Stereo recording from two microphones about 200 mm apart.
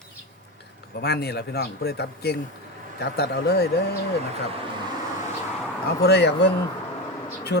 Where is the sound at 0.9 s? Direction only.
55° left (ahead or behind).